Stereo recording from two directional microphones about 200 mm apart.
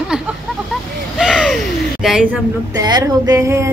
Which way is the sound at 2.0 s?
5° right (ahead or behind).